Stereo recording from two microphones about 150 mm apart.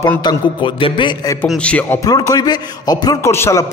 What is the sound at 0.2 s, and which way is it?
A man's voice, 30° left (ahead or behind).